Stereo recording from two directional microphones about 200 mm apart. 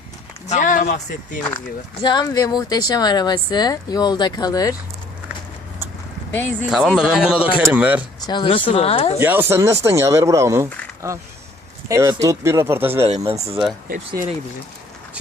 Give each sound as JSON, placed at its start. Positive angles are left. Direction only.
{"t": 0.4, "sound": "speech", "side_deg": 40}
{"t": 2.0, "sound": "speech", "side_deg": 20}
{"t": 6.3, "sound": "speech", "side_deg": 10}
{"t": 6.7, "sound": "a man's voice", "side_deg": 0}
{"t": 8.3, "sound": "speech", "side_deg": 25}
{"t": 9.1, "sound": "speech", "side_deg": -10}
{"t": 11.9, "sound": "speech", "side_deg": -15}
{"t": 13.1, "sound": "speech", "side_deg": -30}
{"t": 13.8, "sound": "speech", "side_deg": -45}